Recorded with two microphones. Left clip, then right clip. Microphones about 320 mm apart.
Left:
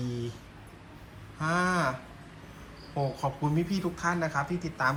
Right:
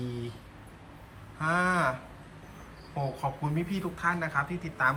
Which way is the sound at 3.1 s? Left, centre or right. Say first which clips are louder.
Left 2 dB; centre.